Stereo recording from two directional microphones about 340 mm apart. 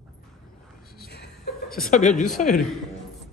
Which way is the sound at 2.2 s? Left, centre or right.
Centre.